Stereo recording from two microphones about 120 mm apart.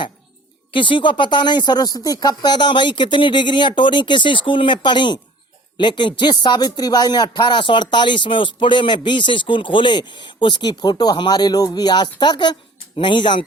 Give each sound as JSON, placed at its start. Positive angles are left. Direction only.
{"t": 0.7, "sound": "speech", "side_deg": 45}